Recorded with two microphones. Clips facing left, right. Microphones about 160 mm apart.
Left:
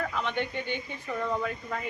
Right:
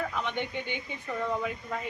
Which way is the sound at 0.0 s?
15° right (ahead or behind).